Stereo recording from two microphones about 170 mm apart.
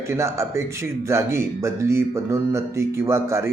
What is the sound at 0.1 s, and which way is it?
Speech, 15° right (ahead or behind).